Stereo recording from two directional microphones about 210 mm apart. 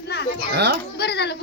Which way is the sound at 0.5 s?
50° right (ahead or behind).